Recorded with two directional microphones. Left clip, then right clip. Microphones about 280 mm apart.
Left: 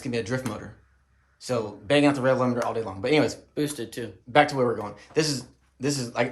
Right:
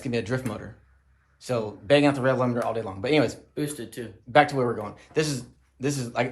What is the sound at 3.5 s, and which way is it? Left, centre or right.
Speech, left.